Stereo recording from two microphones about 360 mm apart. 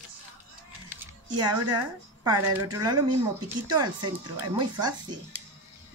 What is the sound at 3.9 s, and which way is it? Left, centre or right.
Speech, right.